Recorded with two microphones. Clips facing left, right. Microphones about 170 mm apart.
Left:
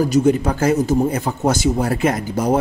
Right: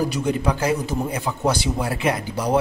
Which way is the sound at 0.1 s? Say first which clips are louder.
Left 7 dB; 45° left (ahead or behind).